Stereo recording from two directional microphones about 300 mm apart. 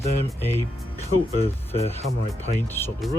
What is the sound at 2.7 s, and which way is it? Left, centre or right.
Speech, centre.